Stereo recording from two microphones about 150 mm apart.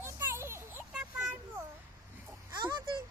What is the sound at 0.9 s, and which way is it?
Children playing, 5° right (ahead or behind).